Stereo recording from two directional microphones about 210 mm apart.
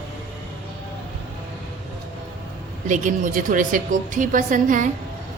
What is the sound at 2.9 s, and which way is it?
A woman's voice, 35° right (ahead or behind).